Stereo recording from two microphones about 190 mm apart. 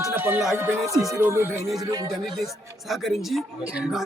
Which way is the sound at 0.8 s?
Centre (ahead or behind).